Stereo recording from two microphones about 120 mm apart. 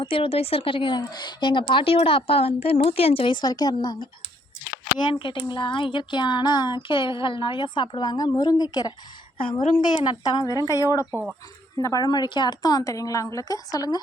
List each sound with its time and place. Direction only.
0.0 s speech: 50° left (ahead or behind)
4.9 s a sound: 40° left (ahead or behind)
9.4 s speech: 45° left (ahead or behind)
10.0 s a sound: 35° left (ahead or behind)
10.7 s a woman's voice: 25° left (ahead or behind)
11.0 s speech: 10° right (ahead or behind)
11.8 s a woman's voice: 30° left (ahead or behind)